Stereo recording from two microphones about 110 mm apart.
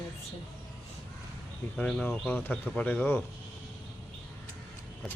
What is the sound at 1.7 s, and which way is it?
Speech, 10° left (ahead or behind).